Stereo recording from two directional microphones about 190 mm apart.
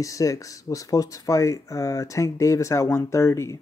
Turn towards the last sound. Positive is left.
turn(degrees=15)  # may be behind; listen again after turning